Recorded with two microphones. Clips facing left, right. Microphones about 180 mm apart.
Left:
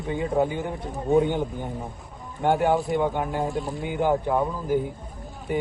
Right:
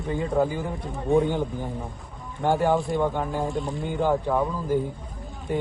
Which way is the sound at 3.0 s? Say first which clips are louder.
Even; 10° left (ahead or behind).